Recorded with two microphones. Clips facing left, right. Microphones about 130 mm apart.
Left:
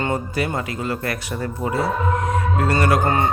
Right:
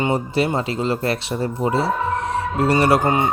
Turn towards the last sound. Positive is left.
turn(degrees=-25)  # may be behind; listen again after turning